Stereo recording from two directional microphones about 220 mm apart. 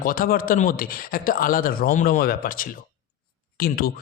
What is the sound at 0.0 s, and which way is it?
A man's voice, 40° left (ahead or behind).